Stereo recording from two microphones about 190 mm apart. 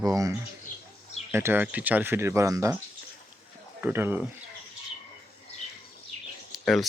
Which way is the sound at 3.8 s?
10° right (ahead or behind).